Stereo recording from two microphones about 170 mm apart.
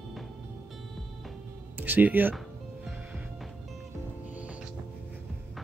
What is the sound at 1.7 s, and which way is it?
Speech, 10° right (ahead or behind).